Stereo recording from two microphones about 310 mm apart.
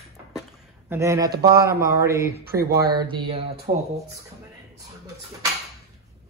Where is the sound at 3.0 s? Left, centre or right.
Centre.